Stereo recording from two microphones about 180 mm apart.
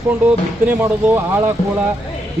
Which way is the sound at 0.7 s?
10° right (ahead or behind).